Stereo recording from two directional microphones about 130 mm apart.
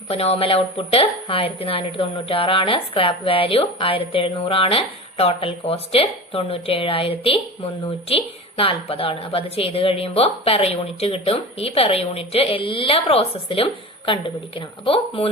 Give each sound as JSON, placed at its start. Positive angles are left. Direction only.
{"t": 0.1, "sound": "speech", "side_deg": 50}